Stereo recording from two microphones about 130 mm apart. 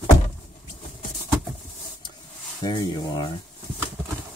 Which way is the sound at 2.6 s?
30° left (ahead or behind).